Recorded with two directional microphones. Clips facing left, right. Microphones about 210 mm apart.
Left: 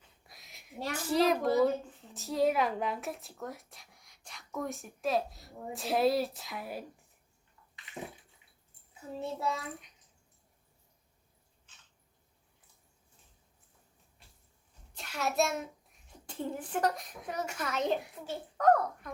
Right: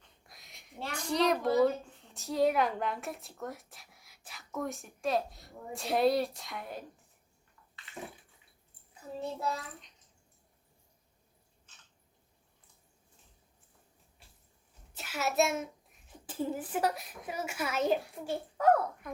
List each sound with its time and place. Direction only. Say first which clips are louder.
0.0 s a sound: even; centre (ahead or behind)
0.9 s a woman's voice: left 1 dB; 5° left (ahead or behind)
7.9 s dog: left 2 dB; 20° left (ahead or behind)
9.4 s a woman's voice: left 1 dB; centre (ahead or behind)
14.9 s a child's voice: right 1 dB; 5° right (ahead or behind)